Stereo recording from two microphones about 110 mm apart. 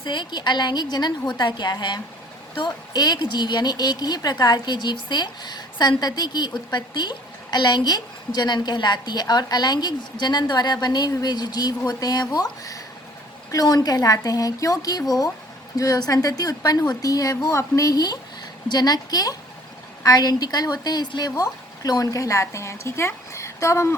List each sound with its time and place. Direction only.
0.0 s a woman's voice: 45° left (ahead or behind); by 23.9 s 25° left (ahead or behind)